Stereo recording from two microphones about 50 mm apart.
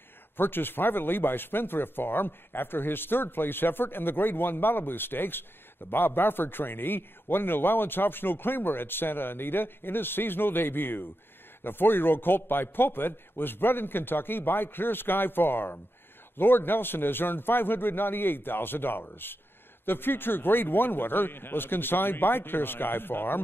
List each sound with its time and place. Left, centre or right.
0.4 s a man's voice: left